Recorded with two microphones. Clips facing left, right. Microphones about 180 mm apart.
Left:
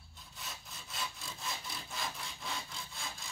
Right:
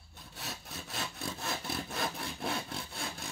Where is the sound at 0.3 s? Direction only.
70° right (ahead or behind).